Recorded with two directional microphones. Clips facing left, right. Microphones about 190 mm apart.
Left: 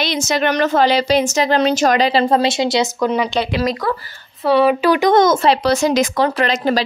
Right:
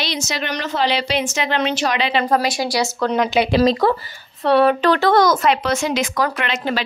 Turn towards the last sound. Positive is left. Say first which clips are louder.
# left 6 dB
turn(degrees=40)  # may be behind; listen again after turning